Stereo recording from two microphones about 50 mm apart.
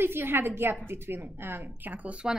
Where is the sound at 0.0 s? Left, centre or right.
Right.